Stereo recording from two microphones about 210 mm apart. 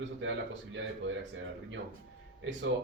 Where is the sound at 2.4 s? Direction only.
65° right (ahead or behind).